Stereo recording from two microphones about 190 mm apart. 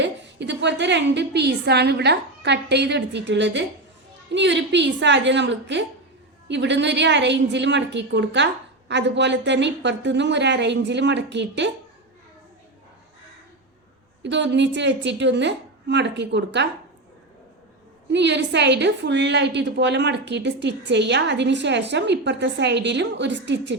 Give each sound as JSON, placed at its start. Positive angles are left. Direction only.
{"t": 0.0, "sound": "a woman's voice", "side_deg": -70}
{"t": 14.2, "sound": "a woman's voice", "side_deg": -70}
{"t": 18.1, "sound": "a woman's voice", "side_deg": -65}